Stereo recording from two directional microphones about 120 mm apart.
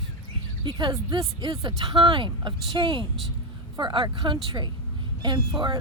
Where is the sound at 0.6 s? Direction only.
40° right (ahead or behind).